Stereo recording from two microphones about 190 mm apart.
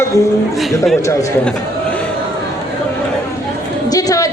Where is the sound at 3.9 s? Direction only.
20° left (ahead or behind).